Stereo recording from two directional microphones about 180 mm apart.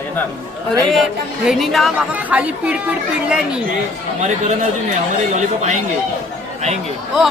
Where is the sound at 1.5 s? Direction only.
Centre (ahead or behind).